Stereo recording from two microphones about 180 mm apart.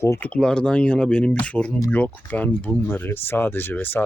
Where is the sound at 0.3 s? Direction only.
5° left (ahead or behind).